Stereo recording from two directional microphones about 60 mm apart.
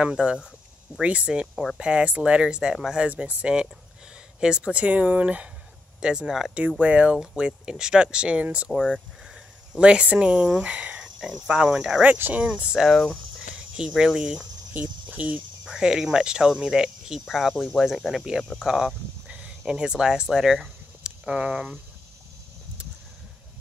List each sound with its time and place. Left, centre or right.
0.0 s speech: centre
1.5 s speech: centre
1.8 s speech: centre
3.1 s speech: right
5.9 s speech: centre
6.8 s speech: right
8.7 s speech: centre
9.3 s speech: centre
12.4 s speech: right
12.9 s speech: centre
13.4 s speech: centre
14.7 s speech: right
15.6 s speech: centre